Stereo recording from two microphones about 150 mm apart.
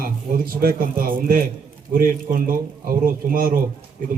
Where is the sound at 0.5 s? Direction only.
75° right (ahead or behind).